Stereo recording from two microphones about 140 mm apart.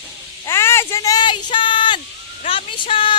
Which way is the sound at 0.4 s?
20° left (ahead or behind).